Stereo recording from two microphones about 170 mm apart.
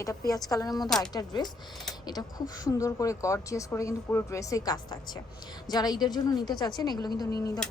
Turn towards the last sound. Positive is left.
turn(degrees=20)  # may be behind; listen again after turning